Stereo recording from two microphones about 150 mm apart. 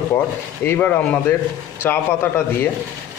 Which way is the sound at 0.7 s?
15° left (ahead or behind).